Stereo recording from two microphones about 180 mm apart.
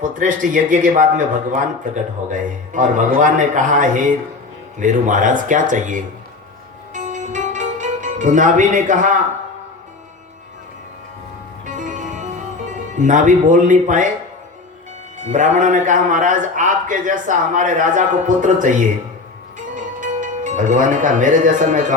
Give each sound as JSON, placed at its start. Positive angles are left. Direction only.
{"t": 0.0, "sound": "a man's voice", "side_deg": -45}
{"t": 6.9, "sound": "music", "side_deg": -45}
{"t": 11.6, "sound": "music", "side_deg": -45}
{"t": 13.0, "sound": "a man's voice", "side_deg": -45}
{"t": 15.2, "sound": "a man's voice", "side_deg": -45}
{"t": 19.7, "sound": "speech", "side_deg": -45}